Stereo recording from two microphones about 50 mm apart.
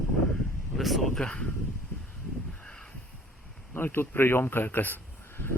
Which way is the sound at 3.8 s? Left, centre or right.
Left.